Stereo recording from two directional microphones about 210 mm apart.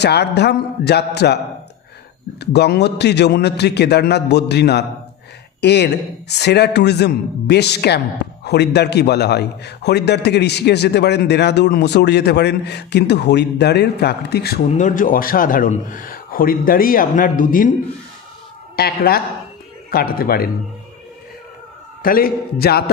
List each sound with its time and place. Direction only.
0.0 s a man's voice: 50° left (ahead or behind)
2.4 s a man's voice: 50° left (ahead or behind)
14.7 s speech: 35° left (ahead or behind)
18.8 s a man's voice: 45° left (ahead or behind)
22.0 s a man's voice: 45° left (ahead or behind)